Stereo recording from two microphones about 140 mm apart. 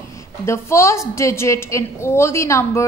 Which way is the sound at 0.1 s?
20° left (ahead or behind).